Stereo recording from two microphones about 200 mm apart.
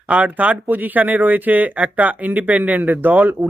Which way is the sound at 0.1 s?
5° right (ahead or behind).